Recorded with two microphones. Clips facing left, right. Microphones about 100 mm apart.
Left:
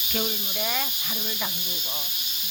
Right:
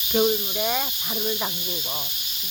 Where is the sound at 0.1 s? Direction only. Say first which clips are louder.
Right 10 dB; 20° right (ahead or behind).